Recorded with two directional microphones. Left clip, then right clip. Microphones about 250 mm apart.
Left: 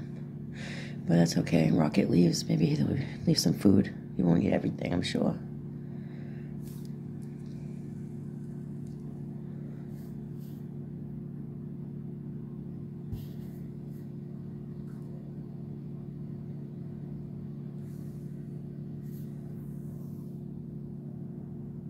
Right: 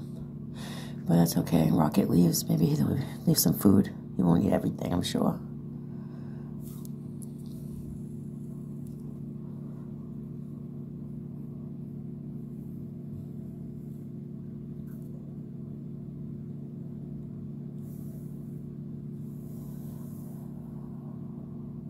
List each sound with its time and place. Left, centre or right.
1.0 s speech: centre